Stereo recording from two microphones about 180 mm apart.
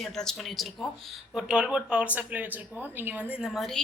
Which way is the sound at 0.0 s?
5° left (ahead or behind).